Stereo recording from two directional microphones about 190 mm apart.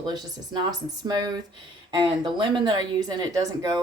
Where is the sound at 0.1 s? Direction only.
20° right (ahead or behind).